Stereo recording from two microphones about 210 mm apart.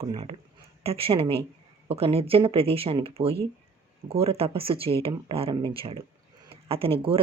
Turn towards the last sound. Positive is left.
turn(degrees=-25)  # may be behind; listen again after turning